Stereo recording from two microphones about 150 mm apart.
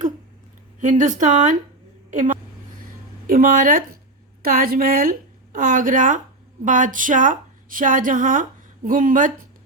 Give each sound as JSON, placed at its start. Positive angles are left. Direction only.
{"t": 0.8, "sound": "speech", "side_deg": -55}
{"t": 2.8, "sound": "a sound", "side_deg": -70}
{"t": 4.4, "sound": "a woman's voice", "side_deg": -75}